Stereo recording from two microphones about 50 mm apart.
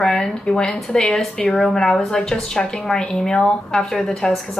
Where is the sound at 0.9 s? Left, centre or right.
Centre.